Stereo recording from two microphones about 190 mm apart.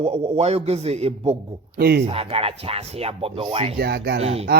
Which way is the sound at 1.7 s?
55° right (ahead or behind).